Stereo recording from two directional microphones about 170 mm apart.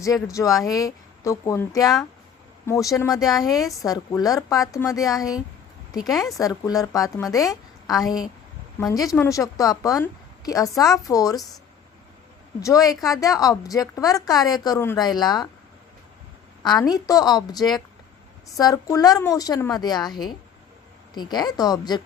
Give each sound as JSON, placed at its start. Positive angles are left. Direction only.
{"t": 0.0, "sound": "speech", "side_deg": 20}
{"t": 3.2, "sound": "a woman's voice", "side_deg": 0}
{"t": 3.8, "sound": "a woman's voice", "side_deg": 20}
{"t": 12.6, "sound": "speech", "side_deg": 20}
{"t": 16.8, "sound": "speech", "side_deg": 20}